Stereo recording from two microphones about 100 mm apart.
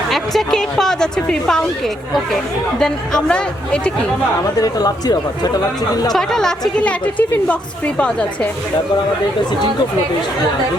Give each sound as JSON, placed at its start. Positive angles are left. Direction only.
{"t": 0.1, "sound": "a woman's voice", "side_deg": 5}
{"t": 2.7, "sound": "a woman's voice", "side_deg": 5}
{"t": 4.6, "sound": "speech", "side_deg": 40}
{"t": 6.1, "sound": "a woman's voice", "side_deg": 5}